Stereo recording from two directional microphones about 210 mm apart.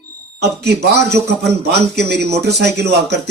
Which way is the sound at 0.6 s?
50° right (ahead or behind).